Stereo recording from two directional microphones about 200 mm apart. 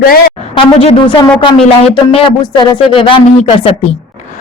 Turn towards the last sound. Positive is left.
turn(degrees=30)  # may be behind; listen again after turning